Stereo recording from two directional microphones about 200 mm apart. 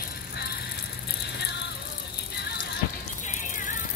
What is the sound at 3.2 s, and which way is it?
Music, 40° left (ahead or behind).